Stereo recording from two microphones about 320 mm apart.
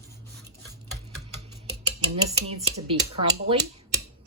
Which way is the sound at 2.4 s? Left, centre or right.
Centre.